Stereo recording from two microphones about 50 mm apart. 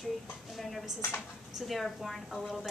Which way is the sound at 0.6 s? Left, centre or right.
Centre.